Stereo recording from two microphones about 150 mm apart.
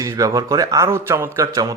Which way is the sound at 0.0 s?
20° right (ahead or behind).